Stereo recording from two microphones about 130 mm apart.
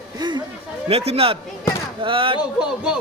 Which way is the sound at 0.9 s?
50° right (ahead or behind).